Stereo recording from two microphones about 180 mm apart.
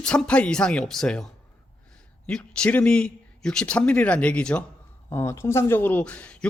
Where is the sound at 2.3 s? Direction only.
5° left (ahead or behind).